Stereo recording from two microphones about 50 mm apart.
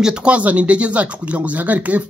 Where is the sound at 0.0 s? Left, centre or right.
Centre.